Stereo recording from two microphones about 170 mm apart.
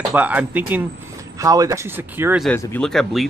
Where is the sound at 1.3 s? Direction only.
20° right (ahead or behind).